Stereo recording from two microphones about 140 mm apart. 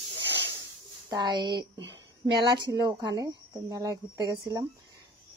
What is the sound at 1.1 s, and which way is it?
Speech, 25° right (ahead or behind).